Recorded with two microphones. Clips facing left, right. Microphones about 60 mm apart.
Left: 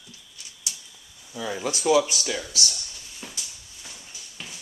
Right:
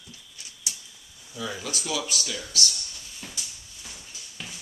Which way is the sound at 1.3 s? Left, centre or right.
Left.